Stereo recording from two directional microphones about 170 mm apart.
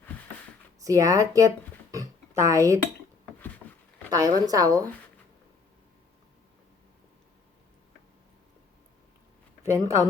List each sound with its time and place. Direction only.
0.8 s speech: 20° right (ahead or behind)
4.1 s a woman's voice: 20° right (ahead or behind)
9.6 s a woman's voice: 20° right (ahead or behind)